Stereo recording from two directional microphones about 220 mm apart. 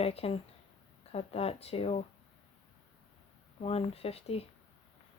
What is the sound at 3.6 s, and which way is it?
Speech, 25° left (ahead or behind).